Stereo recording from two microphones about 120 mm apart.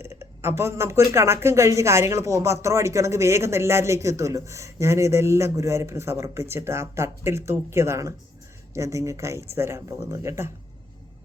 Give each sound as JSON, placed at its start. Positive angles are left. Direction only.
{"t": 0.0, "sound": "speech", "side_deg": -20}